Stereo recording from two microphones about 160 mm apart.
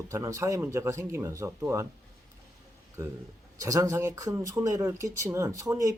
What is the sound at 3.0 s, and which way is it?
Speech, 15° right (ahead or behind).